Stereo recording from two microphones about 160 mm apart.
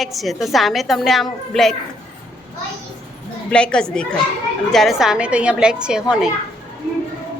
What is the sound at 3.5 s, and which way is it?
A woman's voice, 5° left (ahead or behind).